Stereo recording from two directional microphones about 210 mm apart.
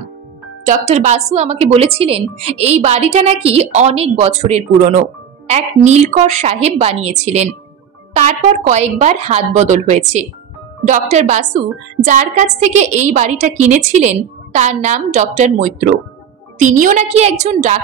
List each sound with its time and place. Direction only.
0.7 s a woman's voice: 35° right (ahead or behind)